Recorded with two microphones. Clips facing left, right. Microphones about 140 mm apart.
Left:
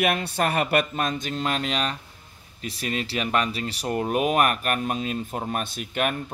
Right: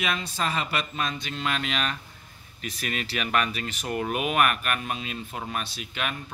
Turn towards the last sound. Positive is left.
turn(degrees=50)  # may be behind; listen again after turning